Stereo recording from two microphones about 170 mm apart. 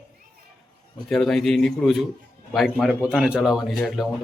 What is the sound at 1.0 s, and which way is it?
Speech, centre (ahead or behind).